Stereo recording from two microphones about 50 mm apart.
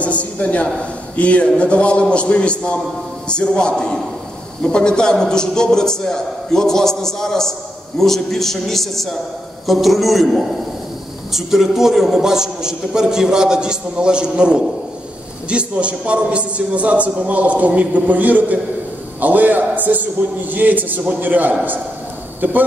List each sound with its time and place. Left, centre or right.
0.0 s a man's voice: left; by 22.6 s right